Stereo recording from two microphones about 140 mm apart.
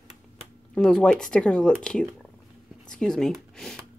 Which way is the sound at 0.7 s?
5° left (ahead or behind).